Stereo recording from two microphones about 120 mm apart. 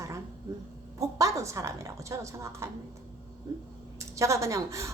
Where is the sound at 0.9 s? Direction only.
25° right (ahead or behind).